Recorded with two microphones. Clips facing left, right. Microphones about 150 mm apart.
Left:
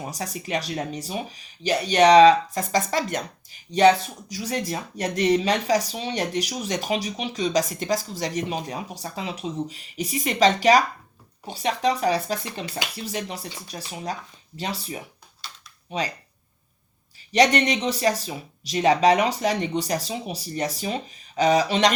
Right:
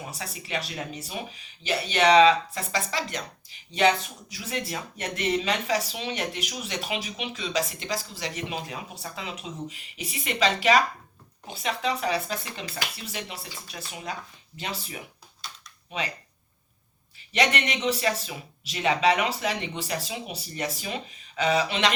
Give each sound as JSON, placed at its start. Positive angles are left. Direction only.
{"t": 0.0, "sound": "speech", "side_deg": 40}
{"t": 17.3, "sound": "speech", "side_deg": 40}